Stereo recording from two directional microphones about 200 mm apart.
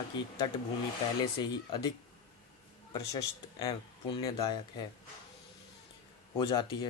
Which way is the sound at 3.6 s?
20° left (ahead or behind).